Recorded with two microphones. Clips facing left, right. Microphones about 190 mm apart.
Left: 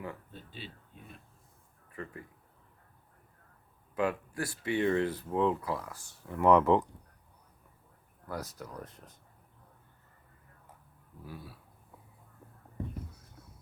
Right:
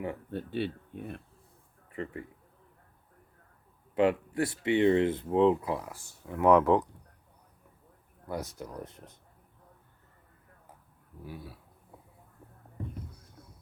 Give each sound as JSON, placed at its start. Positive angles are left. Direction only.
{"t": 0.3, "sound": "speech", "side_deg": -60}
{"t": 1.9, "sound": "a man's voice", "side_deg": -25}
{"t": 3.9, "sound": "speech", "side_deg": -25}
{"t": 6.2, "sound": "speech", "side_deg": -10}
{"t": 8.3, "sound": "speech", "side_deg": -25}